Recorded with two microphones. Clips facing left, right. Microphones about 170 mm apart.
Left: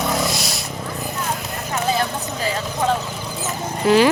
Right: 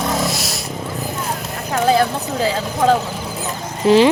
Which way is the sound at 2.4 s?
90° right.